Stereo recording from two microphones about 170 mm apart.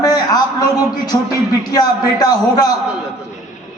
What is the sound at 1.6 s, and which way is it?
A man's voice, 25° left (ahead or behind).